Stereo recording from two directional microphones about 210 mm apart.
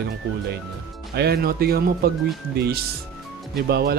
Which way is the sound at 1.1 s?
50° right (ahead or behind).